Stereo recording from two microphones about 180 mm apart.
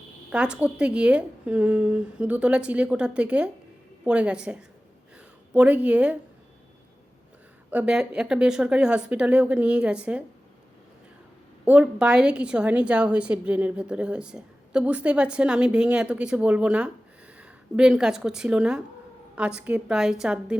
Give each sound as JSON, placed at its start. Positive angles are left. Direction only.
{"t": 0.3, "sound": "a woman's voice", "side_deg": -5}
{"t": 7.7, "sound": "a woman's voice", "side_deg": -5}
{"t": 11.6, "sound": "a woman's voice", "side_deg": -10}